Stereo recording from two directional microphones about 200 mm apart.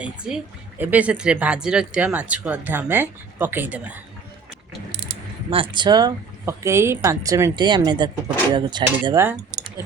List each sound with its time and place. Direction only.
0.0 s a woman's voice: 5° right (ahead or behind)
5.5 s speech: 25° right (ahead or behind)